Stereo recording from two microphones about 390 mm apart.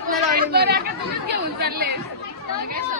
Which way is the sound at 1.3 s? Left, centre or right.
Right.